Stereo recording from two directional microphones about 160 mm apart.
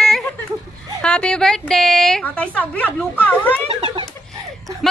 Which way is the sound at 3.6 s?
35° right (ahead or behind).